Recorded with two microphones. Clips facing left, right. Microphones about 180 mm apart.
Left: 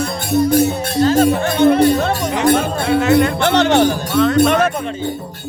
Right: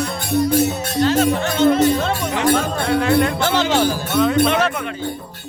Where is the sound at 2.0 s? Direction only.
50° left (ahead or behind).